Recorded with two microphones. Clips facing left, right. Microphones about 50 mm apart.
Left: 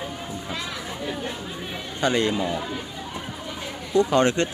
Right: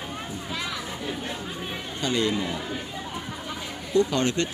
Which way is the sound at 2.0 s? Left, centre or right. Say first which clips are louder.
Left 3 dB; left.